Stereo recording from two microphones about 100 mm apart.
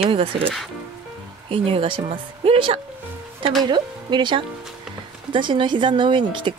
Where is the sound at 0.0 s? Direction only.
65° right (ahead or behind).